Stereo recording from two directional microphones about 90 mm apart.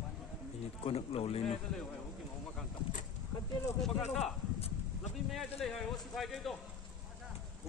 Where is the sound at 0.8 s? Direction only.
90° left.